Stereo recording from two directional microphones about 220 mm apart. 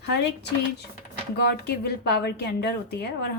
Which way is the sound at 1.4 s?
50° left (ahead or behind).